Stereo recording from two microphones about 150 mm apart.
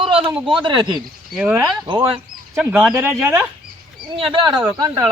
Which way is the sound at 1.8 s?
35° right (ahead or behind).